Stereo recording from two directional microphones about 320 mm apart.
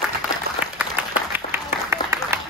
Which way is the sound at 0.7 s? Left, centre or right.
Centre.